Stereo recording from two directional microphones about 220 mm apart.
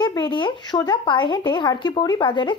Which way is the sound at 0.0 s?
20° left (ahead or behind).